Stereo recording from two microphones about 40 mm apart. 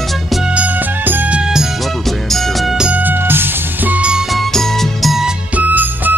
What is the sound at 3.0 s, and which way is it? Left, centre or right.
Music, right.